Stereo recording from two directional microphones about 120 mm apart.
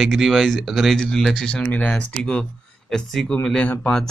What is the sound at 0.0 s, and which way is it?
Speech, centre (ahead or behind).